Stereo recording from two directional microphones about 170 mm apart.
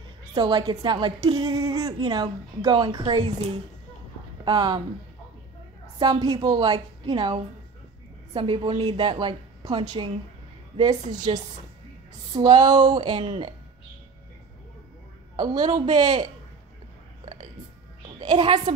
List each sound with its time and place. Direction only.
0.3 s a woman's voice: 25° right (ahead or behind)
4.5 s a woman's voice: 25° right (ahead or behind)
5.9 s a woman's voice: 25° right (ahead or behind)
12.4 s a woman's voice: 25° right (ahead or behind)
15.3 s a woman's voice: 25° right (ahead or behind)
18.2 s a woman's voice: 25° right (ahead or behind)